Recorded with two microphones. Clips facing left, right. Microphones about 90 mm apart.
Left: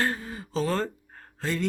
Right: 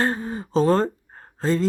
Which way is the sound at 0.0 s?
35° right (ahead or behind).